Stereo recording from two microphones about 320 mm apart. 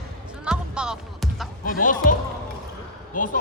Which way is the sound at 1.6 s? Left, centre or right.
Left.